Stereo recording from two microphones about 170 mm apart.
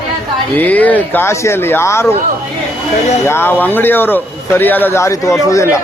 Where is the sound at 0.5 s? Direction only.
10° left (ahead or behind).